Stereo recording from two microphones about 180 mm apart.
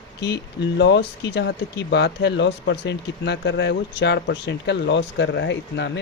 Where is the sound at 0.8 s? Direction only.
75° left (ahead or behind).